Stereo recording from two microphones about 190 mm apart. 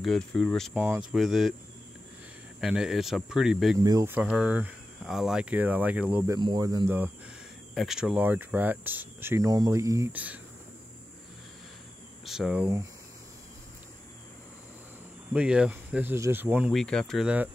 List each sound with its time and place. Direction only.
0.0 s speech: centre (ahead or behind)
2.6 s speech: 5° right (ahead or behind)
3.8 s cricket: 15° right (ahead or behind)
6.4 s speech: 20° right (ahead or behind)
7.7 s cricket: centre (ahead or behind)
12.3 s speech: 5° right (ahead or behind)
15.3 s cricket: 5° right (ahead or behind)
16.7 s speech: 5° left (ahead or behind)